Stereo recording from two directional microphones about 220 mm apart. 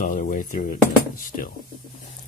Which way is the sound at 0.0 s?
40° left (ahead or behind).